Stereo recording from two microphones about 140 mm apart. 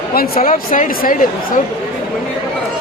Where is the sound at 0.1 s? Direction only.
90° left.